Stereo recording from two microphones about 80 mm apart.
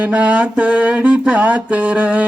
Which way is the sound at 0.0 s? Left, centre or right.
Centre.